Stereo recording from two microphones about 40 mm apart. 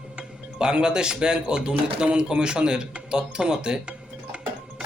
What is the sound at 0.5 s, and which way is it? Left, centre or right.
Speech, right.